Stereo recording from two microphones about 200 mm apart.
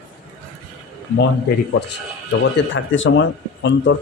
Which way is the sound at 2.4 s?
70° left (ahead or behind).